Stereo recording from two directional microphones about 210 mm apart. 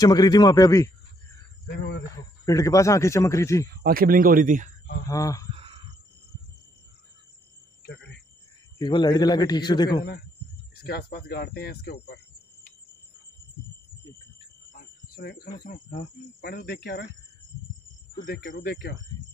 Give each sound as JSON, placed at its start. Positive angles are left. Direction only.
{"t": 0.0, "sound": "a man's voice", "side_deg": 15}
{"t": 2.4, "sound": "a man's voice", "side_deg": 15}
{"t": 3.8, "sound": "speech", "side_deg": -45}
{"t": 5.0, "sound": "a man's voice", "side_deg": 15}
{"t": 7.8, "sound": "cricket", "side_deg": 55}
{"t": 8.7, "sound": "a man's voice", "side_deg": 20}
{"t": 10.7, "sound": "speech", "side_deg": 45}
{"t": 14.7, "sound": "cricket", "side_deg": 45}
{"t": 15.6, "sound": "speech", "side_deg": 40}
{"t": 18.2, "sound": "speech", "side_deg": 45}